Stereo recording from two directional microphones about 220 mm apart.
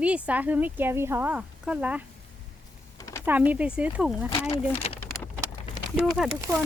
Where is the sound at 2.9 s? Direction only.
15° left (ahead or behind).